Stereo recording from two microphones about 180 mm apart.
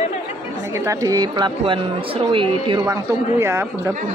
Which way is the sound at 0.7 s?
15° right (ahead or behind).